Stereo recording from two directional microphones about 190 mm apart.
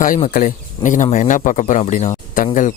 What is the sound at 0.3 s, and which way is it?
Speech, 40° left (ahead or behind).